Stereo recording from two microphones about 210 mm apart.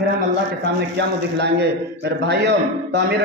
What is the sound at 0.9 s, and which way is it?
A man's voice, 55° right (ahead or behind).